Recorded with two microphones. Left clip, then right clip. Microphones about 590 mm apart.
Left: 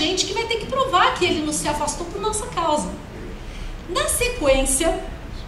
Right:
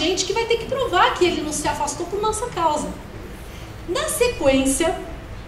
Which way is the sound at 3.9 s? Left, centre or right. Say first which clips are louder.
Right 1 dB; right.